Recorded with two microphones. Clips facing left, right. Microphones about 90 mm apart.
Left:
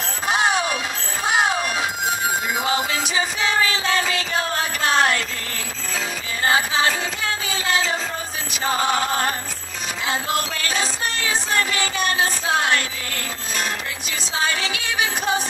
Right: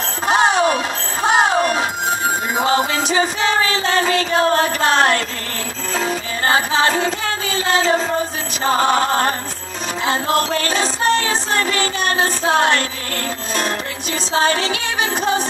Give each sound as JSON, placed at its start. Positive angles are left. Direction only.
{"t": 0.3, "sound": "music", "side_deg": -30}
{"t": 14.3, "sound": "music", "side_deg": -35}